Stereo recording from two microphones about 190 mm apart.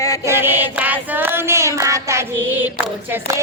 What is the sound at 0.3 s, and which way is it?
Chant, 10° right (ahead or behind).